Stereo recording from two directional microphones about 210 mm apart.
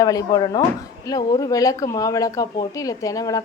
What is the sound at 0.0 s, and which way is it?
A woman's voice, 15° left (ahead or behind).